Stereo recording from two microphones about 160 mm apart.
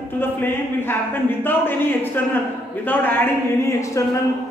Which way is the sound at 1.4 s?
15° left (ahead or behind).